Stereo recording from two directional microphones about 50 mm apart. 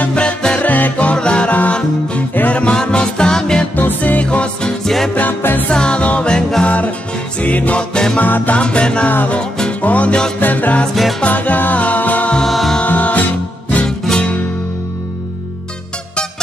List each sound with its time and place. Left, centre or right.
0.1 s music: left
0.6 s music: left; by 3.6 s centre
3.7 s music: left
4.8 s music: centre
5.1 s music: left
5.7 s music: centre
7.3 s music: left
7.9 s music: centre
8.2 s music: left
8.5 s music: centre
12.4 s music: centre
12.8 s music: left
13.8 s music: centre